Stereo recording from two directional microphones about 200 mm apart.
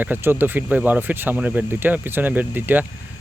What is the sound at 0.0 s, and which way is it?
Speech, 10° right (ahead or behind).